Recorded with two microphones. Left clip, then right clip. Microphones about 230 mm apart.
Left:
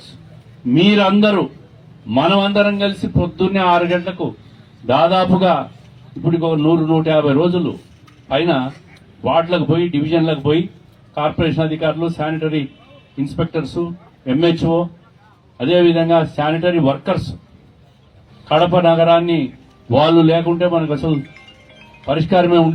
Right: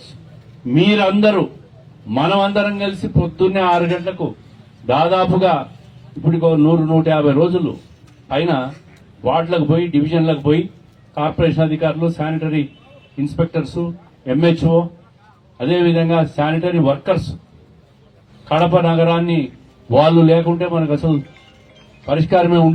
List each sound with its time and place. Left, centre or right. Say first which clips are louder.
0.7 s a man's voice: left 1 dB; left
18.4 s a man's voice: left 2 dB; left